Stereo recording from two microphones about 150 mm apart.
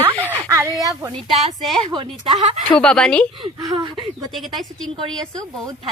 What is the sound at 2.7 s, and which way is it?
Speech, 5° left (ahead or behind).